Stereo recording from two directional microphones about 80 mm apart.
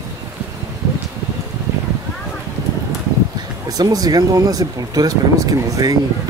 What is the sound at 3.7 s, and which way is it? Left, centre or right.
Speech, right.